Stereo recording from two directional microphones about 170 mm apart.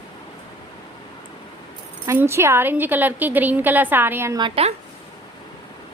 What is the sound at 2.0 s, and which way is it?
A woman's voice, 15° right (ahead or behind).